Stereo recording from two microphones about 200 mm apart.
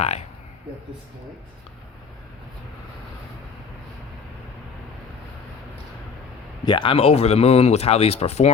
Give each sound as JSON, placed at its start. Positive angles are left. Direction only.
{"t": 0.0, "sound": "speech", "side_deg": 35}
{"t": 6.7, "sound": "speech", "side_deg": 25}